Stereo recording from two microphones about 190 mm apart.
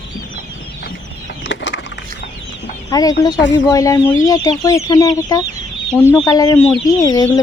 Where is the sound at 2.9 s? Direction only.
20° left (ahead or behind).